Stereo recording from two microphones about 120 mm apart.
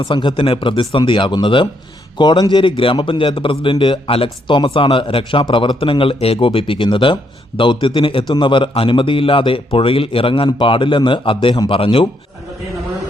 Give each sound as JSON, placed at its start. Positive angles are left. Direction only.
{"t": 0.0, "sound": "a man's voice", "side_deg": 40}
{"t": 11.7, "sound": "a man's voice", "side_deg": 50}